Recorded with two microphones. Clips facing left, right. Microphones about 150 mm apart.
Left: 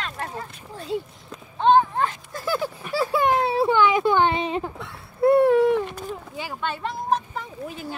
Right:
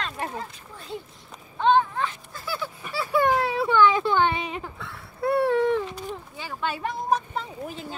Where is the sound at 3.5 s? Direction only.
30° left (ahead or behind).